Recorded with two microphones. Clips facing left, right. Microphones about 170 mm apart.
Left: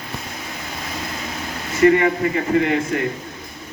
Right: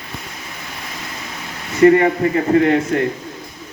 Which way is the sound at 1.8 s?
35° right (ahead or behind).